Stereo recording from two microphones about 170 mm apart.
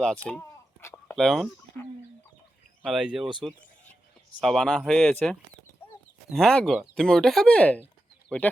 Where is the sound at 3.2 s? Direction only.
25° right (ahead or behind).